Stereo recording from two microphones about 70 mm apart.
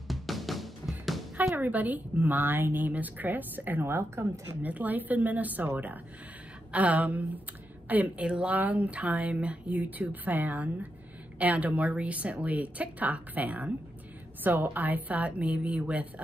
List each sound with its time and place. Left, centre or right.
0.1 s music: centre
1.6 s speech: right
4.6 s speech: right